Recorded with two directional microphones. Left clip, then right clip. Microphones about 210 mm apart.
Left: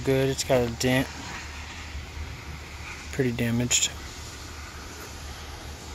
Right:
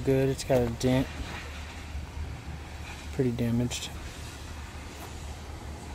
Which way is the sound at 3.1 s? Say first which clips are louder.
Left 2 dB; centre (ahead or behind).